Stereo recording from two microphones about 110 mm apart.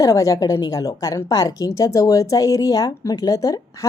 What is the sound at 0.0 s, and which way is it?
A woman's voice, 30° left (ahead or behind).